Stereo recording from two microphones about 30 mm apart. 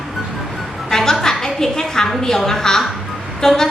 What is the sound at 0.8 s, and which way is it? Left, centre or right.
A woman's voice, centre.